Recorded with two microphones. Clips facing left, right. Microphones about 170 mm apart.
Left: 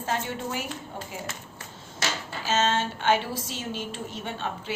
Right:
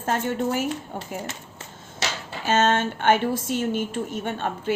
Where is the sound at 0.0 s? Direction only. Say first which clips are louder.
Right 6 dB; 50° right (ahead or behind).